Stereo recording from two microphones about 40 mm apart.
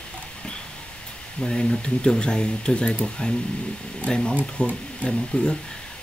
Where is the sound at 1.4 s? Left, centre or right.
Centre.